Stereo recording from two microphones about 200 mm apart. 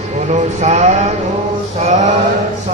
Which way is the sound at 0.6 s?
35° right (ahead or behind).